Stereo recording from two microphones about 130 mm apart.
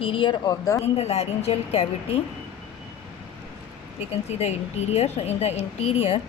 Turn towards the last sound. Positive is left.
turn(degrees=50)  # may be behind; listen again after turning